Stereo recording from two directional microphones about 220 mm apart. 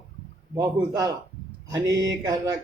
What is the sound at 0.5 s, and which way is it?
Speech, 15° right (ahead or behind).